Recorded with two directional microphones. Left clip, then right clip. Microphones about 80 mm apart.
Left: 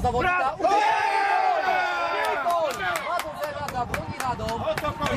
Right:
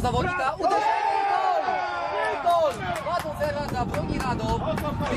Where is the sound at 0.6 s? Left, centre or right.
Left.